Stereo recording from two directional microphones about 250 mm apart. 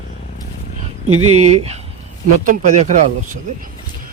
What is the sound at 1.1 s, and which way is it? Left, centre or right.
Speech, right.